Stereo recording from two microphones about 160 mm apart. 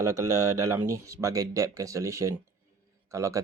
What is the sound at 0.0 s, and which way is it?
Speech, 20° right (ahead or behind).